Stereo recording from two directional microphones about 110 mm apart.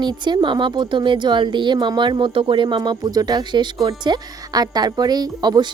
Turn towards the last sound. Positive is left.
turn(degrees=-40)  # may be behind; listen again after turning